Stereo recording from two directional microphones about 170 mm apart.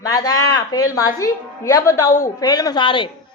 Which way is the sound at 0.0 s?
20° left (ahead or behind).